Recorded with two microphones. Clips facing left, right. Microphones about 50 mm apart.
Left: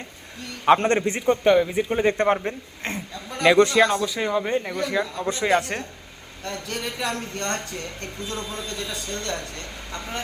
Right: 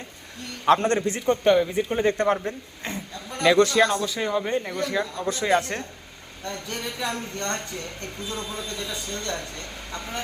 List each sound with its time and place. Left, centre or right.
0.8 s a man's voice: left
1.2 s a man's voice: centre
2.0 s a man's voice: left
2.8 s a sound: left
3.2 s a man's voice: centre
5.2 s a man's voice: left
5.5 s a man's voice: centre
8.9 s speech: centre